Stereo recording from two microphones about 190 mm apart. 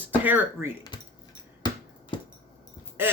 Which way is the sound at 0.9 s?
25° left (ahead or behind).